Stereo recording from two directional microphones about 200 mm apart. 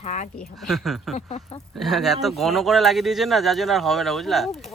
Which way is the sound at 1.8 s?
Centre (ahead or behind).